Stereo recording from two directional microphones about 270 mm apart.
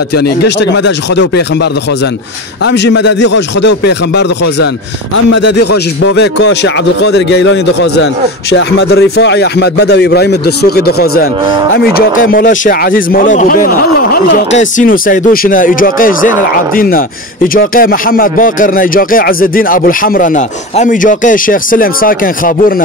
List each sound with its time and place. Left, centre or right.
0.1 s speech: left
2.6 s speech: left